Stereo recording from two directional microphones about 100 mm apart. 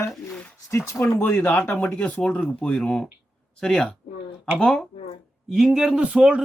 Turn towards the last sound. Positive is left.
turn(degrees=-10)  # may be behind; listen again after turning